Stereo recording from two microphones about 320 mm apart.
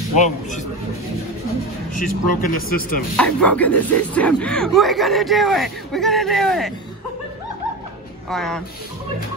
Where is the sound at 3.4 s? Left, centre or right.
Centre.